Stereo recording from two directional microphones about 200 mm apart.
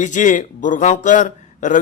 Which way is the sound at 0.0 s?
40° left (ahead or behind).